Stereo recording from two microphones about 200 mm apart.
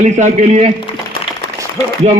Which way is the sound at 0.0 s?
35° right (ahead or behind).